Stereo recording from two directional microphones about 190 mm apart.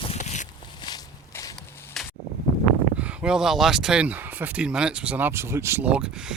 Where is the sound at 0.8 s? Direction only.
20° left (ahead or behind).